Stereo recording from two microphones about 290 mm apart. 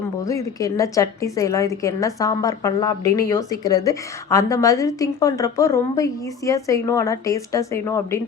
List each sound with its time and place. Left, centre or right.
0.3 s a woman's voice: centre